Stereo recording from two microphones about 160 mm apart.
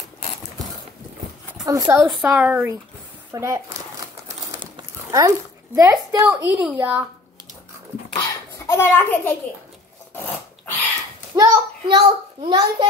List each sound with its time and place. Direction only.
1.7 s a child's voice: 20° right (ahead or behind)
2.0 s a woman's voice: 5° right (ahead or behind)
3.3 s a sound: 20° right (ahead or behind)
4.6 s livestock: 25° right (ahead or behind)
5.8 s a child's voice: 20° right (ahead or behind)
6.2 s a woman's voice: 10° right (ahead or behind)
8.1 s a sound: 20° left (ahead or behind)
10.1 s filing: 10° left (ahead or behind)
11.3 s a sound: 20° right (ahead or behind)
11.9 s a child's voice: 30° right (ahead or behind)